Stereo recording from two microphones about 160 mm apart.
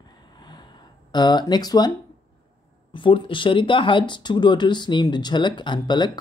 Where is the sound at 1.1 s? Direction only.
25° left (ahead or behind).